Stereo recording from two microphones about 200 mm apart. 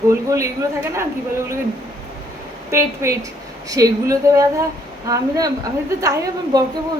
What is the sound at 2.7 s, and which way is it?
A woman's voice, 15° right (ahead or behind).